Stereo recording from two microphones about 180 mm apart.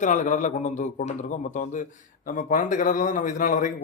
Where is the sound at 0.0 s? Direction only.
45° left (ahead or behind).